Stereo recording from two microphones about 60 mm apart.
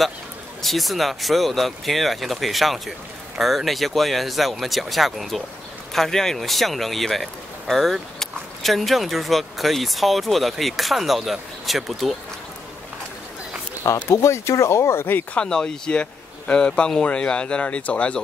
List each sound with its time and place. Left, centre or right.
0.6 s speech: centre
14.0 s speech: left
15.3 s speech: centre